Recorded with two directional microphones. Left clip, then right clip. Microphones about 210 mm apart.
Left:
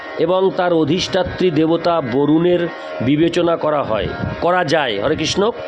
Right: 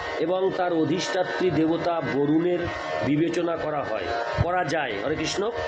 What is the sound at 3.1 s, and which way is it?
Speech, 55° left (ahead or behind).